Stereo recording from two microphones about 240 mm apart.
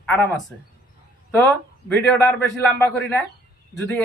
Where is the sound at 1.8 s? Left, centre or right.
Centre.